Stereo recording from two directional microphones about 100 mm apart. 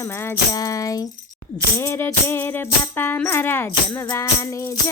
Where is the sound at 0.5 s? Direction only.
35° left (ahead or behind).